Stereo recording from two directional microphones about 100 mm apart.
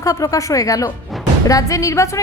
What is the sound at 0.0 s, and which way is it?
A woman's voice, 35° left (ahead or behind).